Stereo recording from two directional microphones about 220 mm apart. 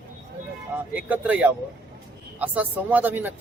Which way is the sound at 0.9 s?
5° right (ahead or behind).